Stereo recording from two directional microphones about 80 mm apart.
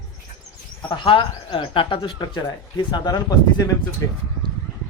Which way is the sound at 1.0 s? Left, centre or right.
Left.